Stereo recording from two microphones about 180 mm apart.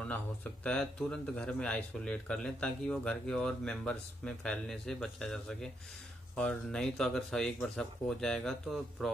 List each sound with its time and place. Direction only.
0.7 s speech: 5° left (ahead or behind)